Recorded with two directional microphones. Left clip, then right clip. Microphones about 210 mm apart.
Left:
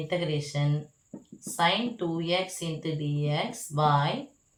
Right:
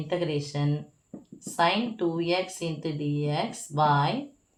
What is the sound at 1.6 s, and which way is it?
Speech, 40° right (ahead or behind).